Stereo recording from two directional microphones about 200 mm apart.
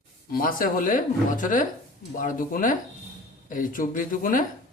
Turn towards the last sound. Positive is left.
turn(degrees=45)  # may be behind; listen again after turning